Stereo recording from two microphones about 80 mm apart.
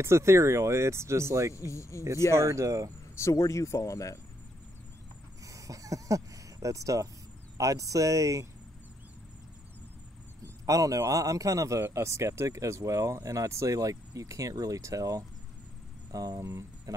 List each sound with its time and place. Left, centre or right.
0.0 s speech: right
1.5 s speech: left
2.3 s speech: right
3.2 s speech: left
5.4 s a sound: right
7.5 s speech: right
10.4 s speech: right